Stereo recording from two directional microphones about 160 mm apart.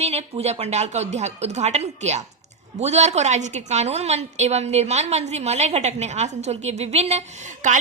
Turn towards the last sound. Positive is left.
turn(degrees=-50)  # may be behind; listen again after turning